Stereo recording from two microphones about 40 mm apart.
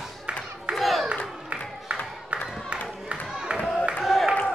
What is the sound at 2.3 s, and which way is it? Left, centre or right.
Crowd, right.